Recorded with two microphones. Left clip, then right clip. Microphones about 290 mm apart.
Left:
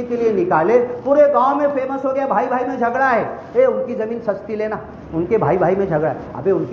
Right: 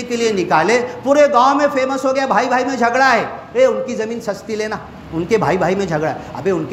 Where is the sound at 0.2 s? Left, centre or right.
Right.